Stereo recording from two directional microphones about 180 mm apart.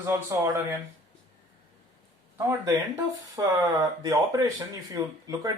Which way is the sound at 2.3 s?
20° right (ahead or behind).